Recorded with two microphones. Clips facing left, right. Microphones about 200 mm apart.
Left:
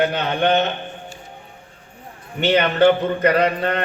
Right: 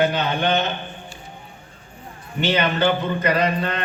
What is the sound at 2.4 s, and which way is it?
A man's voice, 60° left (ahead or behind).